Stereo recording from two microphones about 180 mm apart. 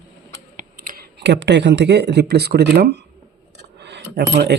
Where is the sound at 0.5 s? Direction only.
50° right (ahead or behind).